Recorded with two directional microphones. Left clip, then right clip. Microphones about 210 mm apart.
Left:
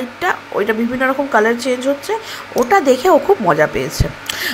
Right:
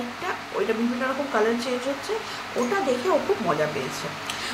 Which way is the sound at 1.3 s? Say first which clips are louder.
Left 9 dB; 40° left (ahead or behind).